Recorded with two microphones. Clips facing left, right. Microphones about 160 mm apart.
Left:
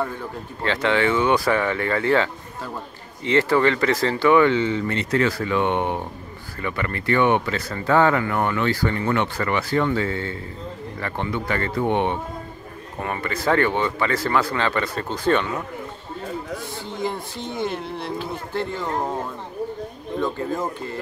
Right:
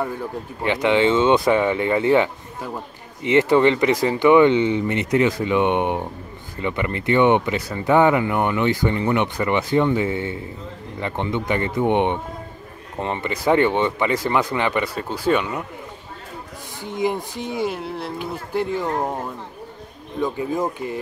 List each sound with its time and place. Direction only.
0.6 s speech: 15° right (ahead or behind)
16.8 s speech: 15° right (ahead or behind)
20.2 s speech: 10° right (ahead or behind)